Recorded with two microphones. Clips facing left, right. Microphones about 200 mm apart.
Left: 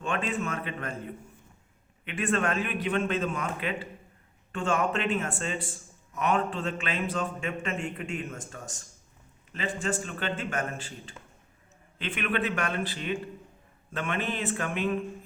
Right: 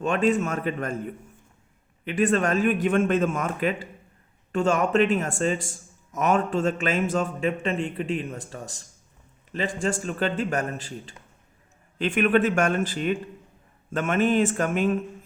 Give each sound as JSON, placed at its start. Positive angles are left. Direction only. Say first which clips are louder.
{"t": 0.0, "sound": "a man's voice", "louder": "right 8 dB", "side_deg": -40}
{"t": 2.0, "sound": "a man's voice", "louder": "right 6 dB", "side_deg": -35}
{"t": 10.0, "sound": "a man's voice", "louder": "right 7 dB", "side_deg": -40}